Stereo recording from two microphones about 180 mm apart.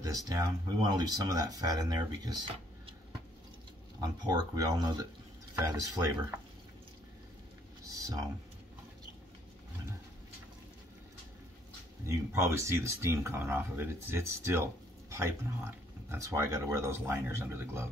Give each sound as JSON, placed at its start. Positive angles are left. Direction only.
{"t": 0.0, "sound": "speech", "side_deg": -20}
{"t": 4.0, "sound": "speech", "side_deg": -20}
{"t": 7.8, "sound": "a sound", "side_deg": -20}
{"t": 12.1, "sound": "speech", "side_deg": -15}